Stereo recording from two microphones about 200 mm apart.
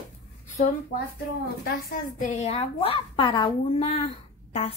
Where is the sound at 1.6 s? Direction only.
45° left (ahead or behind).